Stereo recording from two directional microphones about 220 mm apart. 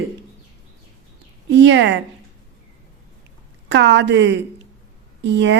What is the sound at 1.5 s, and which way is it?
Speech, 55° right (ahead or behind).